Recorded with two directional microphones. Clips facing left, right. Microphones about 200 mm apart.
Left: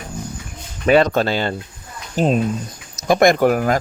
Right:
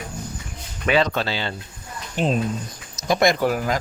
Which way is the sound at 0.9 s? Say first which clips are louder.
Left 6 dB; 45° left (ahead or behind).